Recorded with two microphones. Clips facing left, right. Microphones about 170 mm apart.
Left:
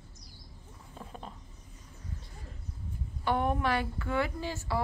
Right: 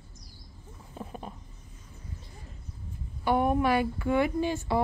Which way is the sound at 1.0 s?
10° right (ahead or behind).